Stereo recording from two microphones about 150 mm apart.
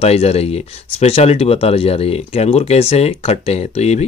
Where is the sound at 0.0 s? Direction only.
40° left (ahead or behind).